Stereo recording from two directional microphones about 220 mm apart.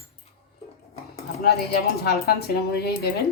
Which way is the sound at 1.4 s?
45° left (ahead or behind).